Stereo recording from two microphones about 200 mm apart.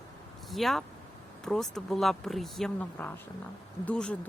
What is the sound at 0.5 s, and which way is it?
Speech, centre (ahead or behind).